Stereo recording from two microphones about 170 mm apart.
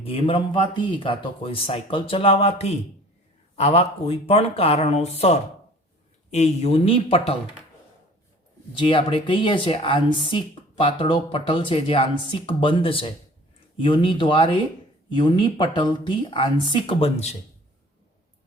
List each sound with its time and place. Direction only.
0.0 s a woman's voice: 30° left (ahead or behind)
8.7 s a woman's voice: 30° left (ahead or behind)